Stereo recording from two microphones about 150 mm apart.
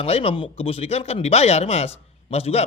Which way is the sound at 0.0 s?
40° left (ahead or behind).